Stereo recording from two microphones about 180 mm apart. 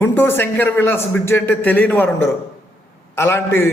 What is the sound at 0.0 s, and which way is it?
A man's voice, 10° left (ahead or behind).